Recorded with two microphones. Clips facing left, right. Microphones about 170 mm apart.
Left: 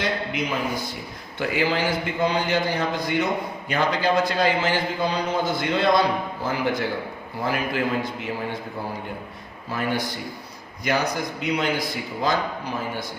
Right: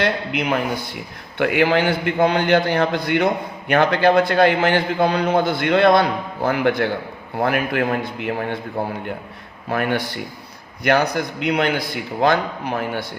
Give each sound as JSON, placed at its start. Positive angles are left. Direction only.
{"t": 0.0, "sound": "a man's voice", "side_deg": -65}